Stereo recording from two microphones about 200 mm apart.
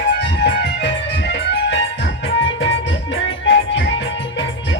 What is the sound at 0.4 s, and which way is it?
Music, 55° left (ahead or behind).